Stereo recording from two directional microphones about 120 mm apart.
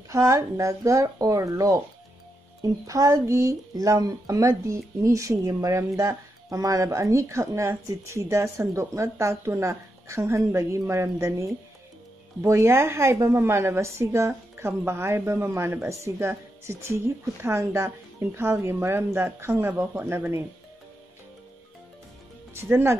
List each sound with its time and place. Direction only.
0.1 s a woman's voice: 25° right (ahead or behind)
22.5 s speech: 20° right (ahead or behind)